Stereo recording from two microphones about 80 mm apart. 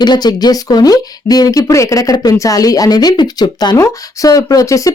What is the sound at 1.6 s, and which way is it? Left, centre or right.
Speech, left.